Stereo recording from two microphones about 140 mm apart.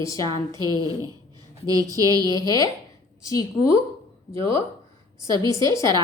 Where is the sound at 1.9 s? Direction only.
25° right (ahead or behind).